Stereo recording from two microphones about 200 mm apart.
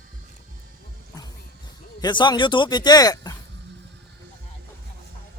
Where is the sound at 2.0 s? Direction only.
20° left (ahead or behind).